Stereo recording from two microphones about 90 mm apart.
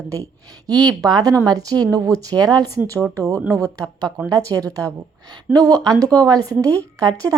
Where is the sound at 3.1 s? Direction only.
35° right (ahead or behind).